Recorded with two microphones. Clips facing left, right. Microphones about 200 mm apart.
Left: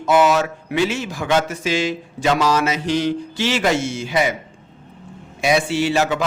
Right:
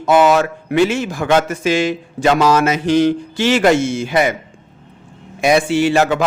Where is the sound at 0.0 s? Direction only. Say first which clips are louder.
Right 3 dB; 55° right (ahead or behind).